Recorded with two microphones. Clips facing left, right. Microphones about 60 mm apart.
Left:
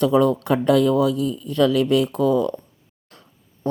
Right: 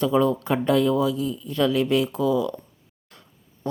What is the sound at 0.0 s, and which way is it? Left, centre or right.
Speech, left.